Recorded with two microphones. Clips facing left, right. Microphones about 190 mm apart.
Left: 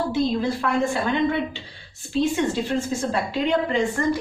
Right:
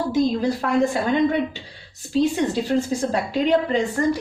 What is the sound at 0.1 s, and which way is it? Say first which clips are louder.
Speech: right 2 dB; 40° right (ahead or behind).